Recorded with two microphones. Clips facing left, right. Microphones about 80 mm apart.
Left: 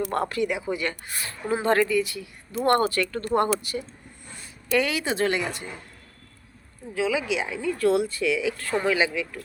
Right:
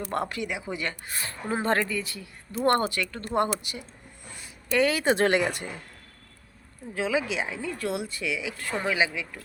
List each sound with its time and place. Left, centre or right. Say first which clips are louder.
0.1 s speech: left 4 dB; centre
2.9 s speech: left 4 dB; centre
4.7 s speech: right 1 dB; right
5.1 s speech: right 2 dB; right
6.9 s speech: left 2 dB; right; by 9.4 s centre